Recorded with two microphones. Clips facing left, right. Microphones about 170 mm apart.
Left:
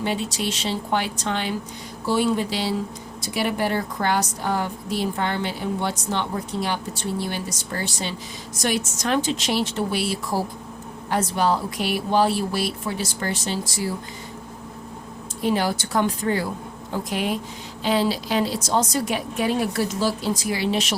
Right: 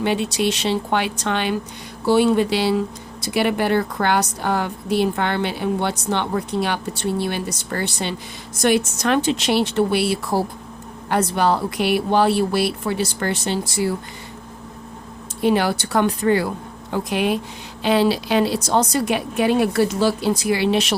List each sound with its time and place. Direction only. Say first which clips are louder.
0.0 s a woman's voice: right 5 dB; 65° right (ahead or behind)
15.4 s a woman's voice: right 4 dB; 65° right (ahead or behind)